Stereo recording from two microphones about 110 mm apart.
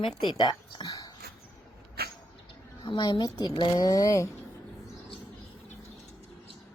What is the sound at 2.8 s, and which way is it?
Speech, 45° left (ahead or behind).